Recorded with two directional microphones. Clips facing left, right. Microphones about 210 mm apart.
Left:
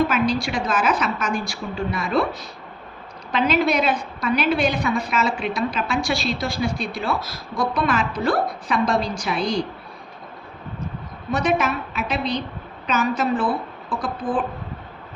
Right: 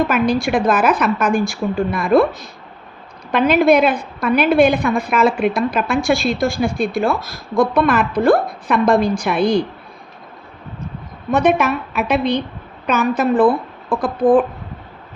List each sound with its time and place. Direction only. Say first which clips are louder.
0.0 s a woman's voice: right 4 dB; 55° right (ahead or behind)
11.3 s a woman's voice: right 6 dB; 55° right (ahead or behind)